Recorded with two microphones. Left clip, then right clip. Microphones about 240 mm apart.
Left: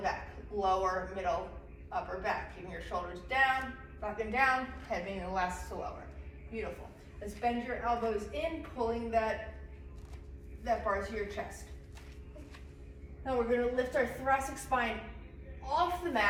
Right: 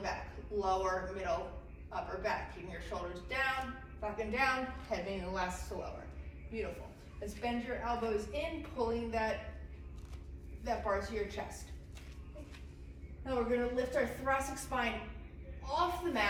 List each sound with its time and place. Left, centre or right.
0.5 s a woman's voice: centre
10.6 s a woman's voice: centre
13.2 s a woman's voice: centre
15.7 s a woman's voice: centre